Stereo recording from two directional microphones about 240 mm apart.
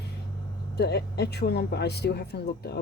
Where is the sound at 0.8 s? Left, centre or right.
Left.